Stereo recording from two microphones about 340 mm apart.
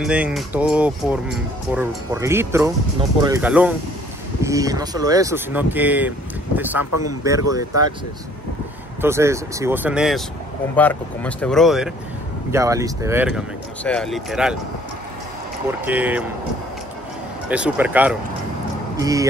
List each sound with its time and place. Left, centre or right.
0.0 s speech: centre
6.9 s speech: left
7.2 s speech: centre
9.0 s speech: centre
15.8 s speech: centre
17.5 s speech: centre